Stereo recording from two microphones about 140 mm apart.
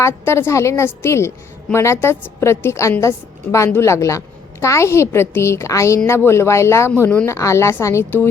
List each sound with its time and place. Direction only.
0.0 s a woman's voice: 20° left (ahead or behind)